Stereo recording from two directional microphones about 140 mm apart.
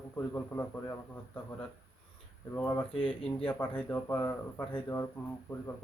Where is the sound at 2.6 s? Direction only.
20° left (ahead or behind).